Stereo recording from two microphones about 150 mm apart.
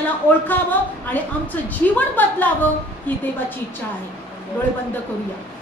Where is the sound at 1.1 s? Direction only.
10° left (ahead or behind).